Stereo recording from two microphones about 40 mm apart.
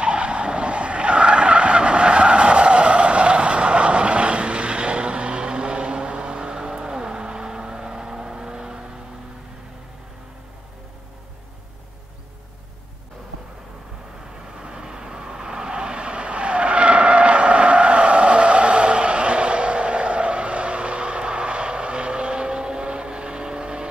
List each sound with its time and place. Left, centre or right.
0.0 s vehicle: right
14.6 s vehicle: centre